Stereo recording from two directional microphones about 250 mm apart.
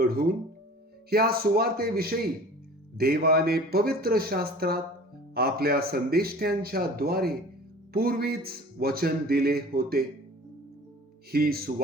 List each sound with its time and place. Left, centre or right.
0.0 s speech: right
11.3 s speech: right